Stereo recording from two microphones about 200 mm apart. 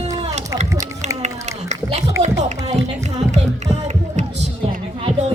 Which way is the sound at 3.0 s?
35° right (ahead or behind).